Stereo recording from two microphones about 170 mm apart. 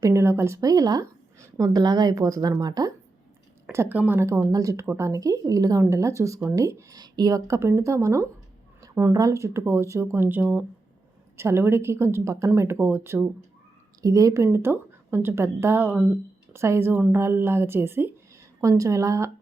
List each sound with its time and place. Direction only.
0.0 s a woman's voice: 15° right (ahead or behind)
3.7 s a woman's voice: 15° right (ahead or behind)